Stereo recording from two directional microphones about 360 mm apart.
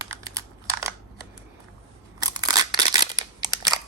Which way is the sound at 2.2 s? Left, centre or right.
Centre.